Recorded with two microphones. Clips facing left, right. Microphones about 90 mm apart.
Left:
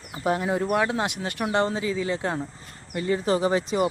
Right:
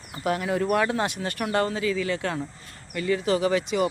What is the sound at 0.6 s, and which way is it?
Speech, 15° left (ahead or behind).